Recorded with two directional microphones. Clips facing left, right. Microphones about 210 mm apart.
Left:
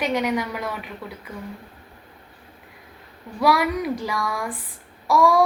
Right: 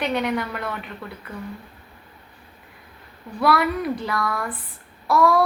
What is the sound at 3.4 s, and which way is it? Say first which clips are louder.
A woman's voice: even; 15° left (ahead or behind).